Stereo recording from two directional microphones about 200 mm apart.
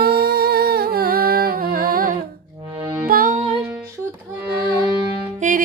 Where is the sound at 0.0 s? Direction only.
55° right (ahead or behind).